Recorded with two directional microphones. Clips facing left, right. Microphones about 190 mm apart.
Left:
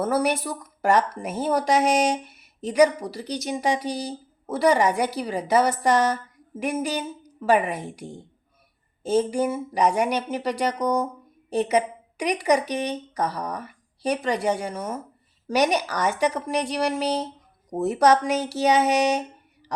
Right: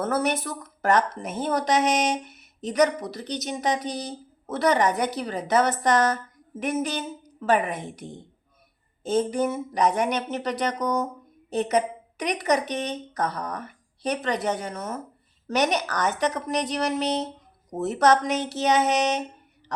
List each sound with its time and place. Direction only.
0.0 s a woman's voice: 10° left (ahead or behind)
7.6 s a woman's voice: 35° left (ahead or behind)
9.0 s a woman's voice: 10° left (ahead or behind)